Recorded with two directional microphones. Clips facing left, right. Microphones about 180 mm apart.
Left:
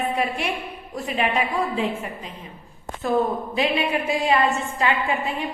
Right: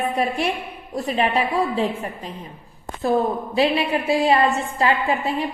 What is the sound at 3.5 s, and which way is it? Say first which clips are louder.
A woman's voice: right 3 dB; 35° right (ahead or behind).